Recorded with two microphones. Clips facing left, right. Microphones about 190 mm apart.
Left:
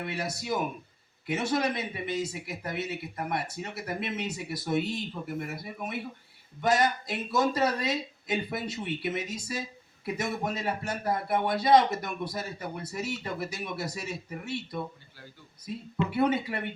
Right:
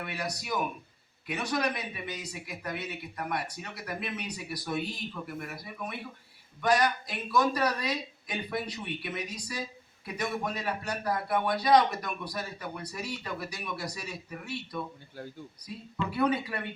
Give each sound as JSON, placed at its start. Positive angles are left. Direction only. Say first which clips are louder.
{"t": 0.0, "sound": "speech", "louder": "left 2 dB", "side_deg": 25}
{"t": 16.0, "sound": "speech", "louder": "left 1 dB", "side_deg": 25}